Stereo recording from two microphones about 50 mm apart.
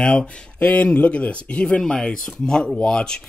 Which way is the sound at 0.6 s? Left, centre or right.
Left.